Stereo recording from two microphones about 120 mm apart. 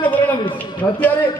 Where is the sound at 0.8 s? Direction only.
25° left (ahead or behind).